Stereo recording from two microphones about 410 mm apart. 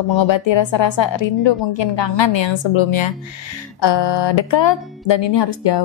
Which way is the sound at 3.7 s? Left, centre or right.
Left.